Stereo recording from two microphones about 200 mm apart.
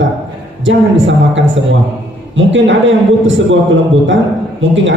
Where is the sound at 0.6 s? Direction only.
70° right (ahead or behind).